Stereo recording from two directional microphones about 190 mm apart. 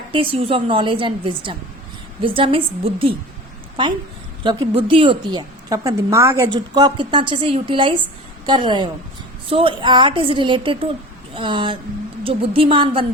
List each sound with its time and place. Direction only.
0.1 s a woman's voice: 30° right (ahead or behind)
4.4 s a woman's voice: 25° right (ahead or behind)